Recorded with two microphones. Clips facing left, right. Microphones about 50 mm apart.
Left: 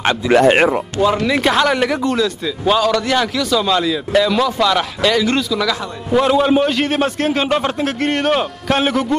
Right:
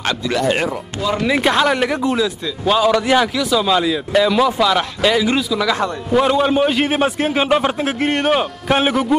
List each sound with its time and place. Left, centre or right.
0.3 s speech: left
1.2 s a man's voice: centre